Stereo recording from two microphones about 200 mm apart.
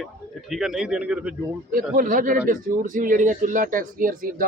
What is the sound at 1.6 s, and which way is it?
A man's voice, 45° right (ahead or behind).